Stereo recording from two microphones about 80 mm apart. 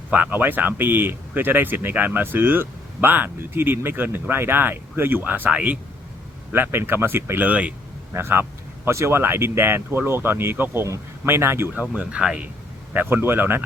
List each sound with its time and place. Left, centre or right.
0.1 s speech: right
6.5 s speech: right
8.1 s speech: right
11.8 s speech: centre; by 13.6 s right